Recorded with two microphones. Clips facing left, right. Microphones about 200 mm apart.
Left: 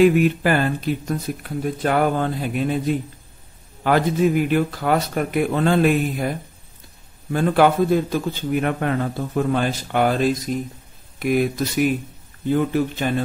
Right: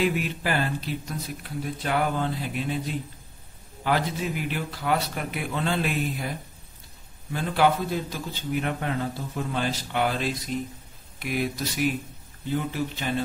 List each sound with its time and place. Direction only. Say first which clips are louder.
0.0 s speech: left 11 dB; 55° left (ahead or behind)
7.3 s speech: left 7 dB; 55° left (ahead or behind)